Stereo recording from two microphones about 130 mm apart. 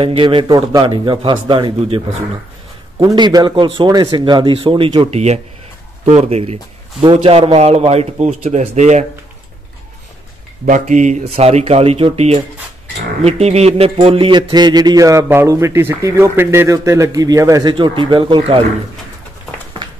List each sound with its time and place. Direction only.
0.0 s speech: 40° right (ahead or behind)
3.1 s speech: 30° right (ahead or behind)
5.1 s speech: 55° right (ahead or behind)
7.0 s a man's voice: 45° right (ahead or behind); by 9.0 s 65° right (ahead or behind)
10.6 s a man's voice: 75° right (ahead or behind); by 18.6 s 40° right (ahead or behind)
19.8 s a sound: 35° right (ahead or behind)